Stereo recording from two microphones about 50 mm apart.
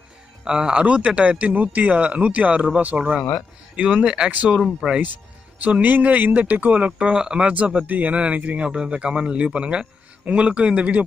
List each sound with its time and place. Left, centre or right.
0.4 s speech: centre
5.6 s speech: right
7.0 s speech: centre